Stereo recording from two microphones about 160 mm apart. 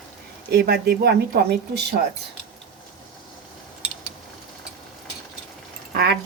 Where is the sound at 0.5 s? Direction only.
75° right (ahead or behind); by 2.0 s 90° right.